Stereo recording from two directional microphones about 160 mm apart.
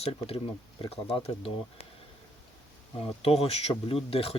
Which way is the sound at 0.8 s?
35° left (ahead or behind).